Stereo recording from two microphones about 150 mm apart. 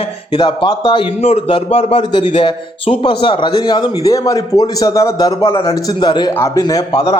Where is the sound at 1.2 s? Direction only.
45° left (ahead or behind).